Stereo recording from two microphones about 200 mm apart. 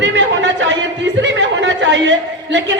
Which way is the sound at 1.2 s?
65° right (ahead or behind).